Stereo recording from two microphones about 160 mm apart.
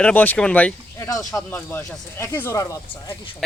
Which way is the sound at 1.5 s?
15° left (ahead or behind).